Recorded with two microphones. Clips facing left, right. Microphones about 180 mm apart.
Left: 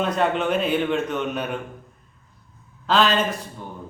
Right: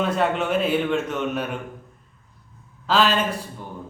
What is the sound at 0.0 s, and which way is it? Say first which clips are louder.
Speech: even; 5° right (ahead or behind).